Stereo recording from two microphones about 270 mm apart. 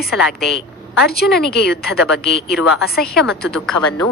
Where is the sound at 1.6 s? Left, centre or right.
Left.